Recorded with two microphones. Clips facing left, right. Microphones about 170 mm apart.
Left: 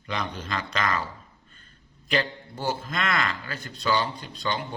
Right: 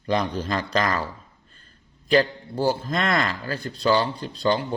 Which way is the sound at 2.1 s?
35° right (ahead or behind).